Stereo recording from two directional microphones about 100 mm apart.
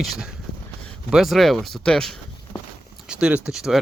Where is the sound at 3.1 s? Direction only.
10° right (ahead or behind).